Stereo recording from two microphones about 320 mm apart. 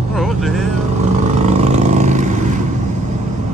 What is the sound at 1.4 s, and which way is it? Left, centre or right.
Vehicle, right.